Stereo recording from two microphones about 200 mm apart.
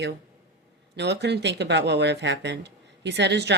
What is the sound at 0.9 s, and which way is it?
Speech, 60° right (ahead or behind).